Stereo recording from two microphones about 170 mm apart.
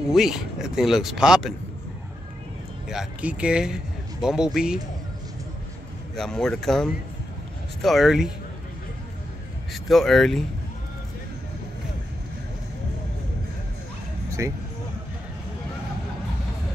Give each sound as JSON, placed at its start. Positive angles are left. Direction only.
{"t": 0.1, "sound": "speech", "side_deg": 0}
{"t": 2.9, "sound": "speech", "side_deg": -5}
{"t": 6.1, "sound": "speech", "side_deg": 5}
{"t": 9.8, "sound": "speech", "side_deg": 0}
{"t": 14.4, "sound": "speech", "side_deg": -20}